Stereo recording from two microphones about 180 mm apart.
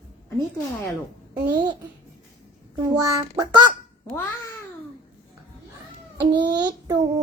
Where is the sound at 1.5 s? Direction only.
25° right (ahead or behind).